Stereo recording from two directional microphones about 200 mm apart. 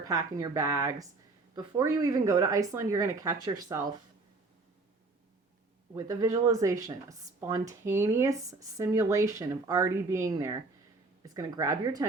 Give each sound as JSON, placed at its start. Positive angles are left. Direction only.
{"t": 0.1, "sound": "a woman's voice", "side_deg": -20}
{"t": 5.9, "sound": "a woman's voice", "side_deg": -15}